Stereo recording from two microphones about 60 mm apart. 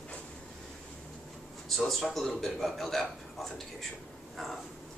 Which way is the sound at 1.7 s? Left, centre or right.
Centre.